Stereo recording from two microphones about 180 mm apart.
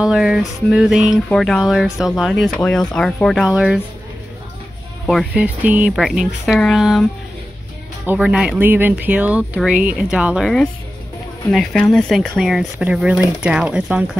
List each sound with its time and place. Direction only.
0.0 s music: 5° right (ahead or behind)
5.0 s music: 5° right (ahead or behind)
8.0 s speech: 5° right (ahead or behind)
11.5 s music: centre (ahead or behind)